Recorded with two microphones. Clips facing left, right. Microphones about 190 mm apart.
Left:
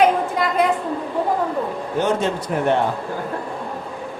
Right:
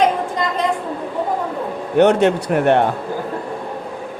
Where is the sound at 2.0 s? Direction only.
70° right (ahead or behind).